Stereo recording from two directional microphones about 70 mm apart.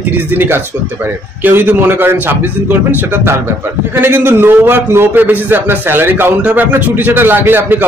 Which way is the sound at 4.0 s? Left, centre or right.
Right.